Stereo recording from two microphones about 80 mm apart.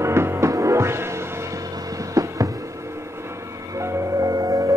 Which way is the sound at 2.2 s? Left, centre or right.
Right.